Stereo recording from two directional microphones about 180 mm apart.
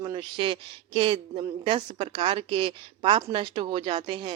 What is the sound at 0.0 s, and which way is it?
Speech, 25° right (ahead or behind).